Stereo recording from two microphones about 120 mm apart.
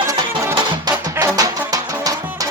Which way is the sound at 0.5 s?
35° right (ahead or behind).